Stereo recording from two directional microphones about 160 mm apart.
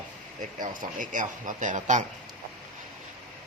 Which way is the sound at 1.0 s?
55° right (ahead or behind).